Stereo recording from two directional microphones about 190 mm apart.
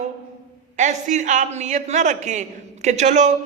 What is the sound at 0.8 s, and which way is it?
A woman's voice, 40° right (ahead or behind).